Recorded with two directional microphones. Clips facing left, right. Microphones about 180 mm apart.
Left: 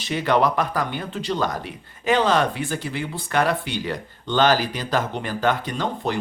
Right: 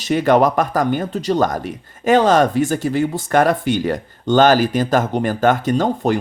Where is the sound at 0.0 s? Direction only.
45° right (ahead or behind).